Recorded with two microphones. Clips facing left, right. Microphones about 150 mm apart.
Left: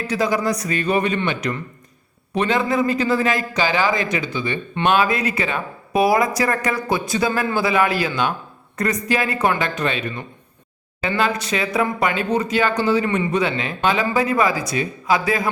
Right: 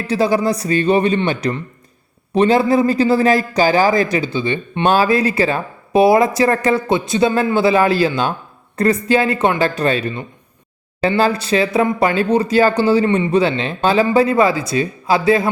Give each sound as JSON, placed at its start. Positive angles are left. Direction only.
{"t": 0.1, "sound": "a man's voice", "side_deg": -30}
{"t": 11.2, "sound": "speech", "side_deg": -30}